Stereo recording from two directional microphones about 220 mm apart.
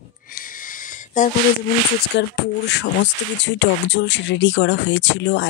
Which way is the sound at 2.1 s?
55° left (ahead or behind).